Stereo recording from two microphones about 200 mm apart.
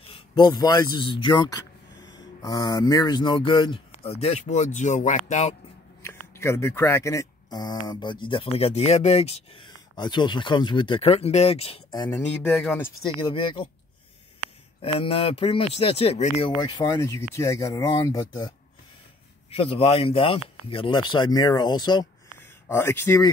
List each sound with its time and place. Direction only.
0.1 s speech: 20° left (ahead or behind)
6.0 s speech: 15° left (ahead or behind)
12.4 s speech: 5° left (ahead or behind)
13.2 s speech: 25° left (ahead or behind)
14.8 s speech: 25° left (ahead or behind)
16.4 s speech: 20° left (ahead or behind)
19.5 s speech: 30° left (ahead or behind)